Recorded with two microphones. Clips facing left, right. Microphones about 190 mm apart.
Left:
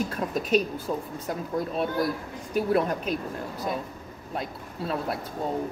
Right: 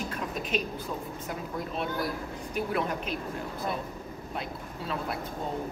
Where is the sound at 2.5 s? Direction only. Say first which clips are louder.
Left 6 dB; 40° left (ahead or behind).